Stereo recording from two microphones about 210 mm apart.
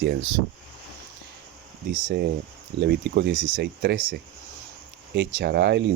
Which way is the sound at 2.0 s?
50° right (ahead or behind).